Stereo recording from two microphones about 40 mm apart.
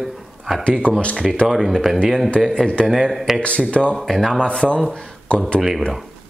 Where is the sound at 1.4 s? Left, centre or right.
Centre.